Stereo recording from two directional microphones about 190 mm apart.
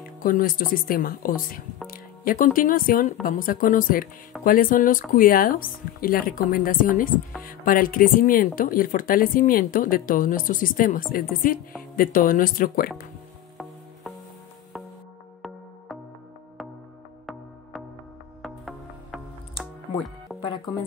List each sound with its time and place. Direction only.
0.2 s speech: 50° left (ahead or behind)
18.4 s music: centre (ahead or behind)
20.4 s music: 25° left (ahead or behind)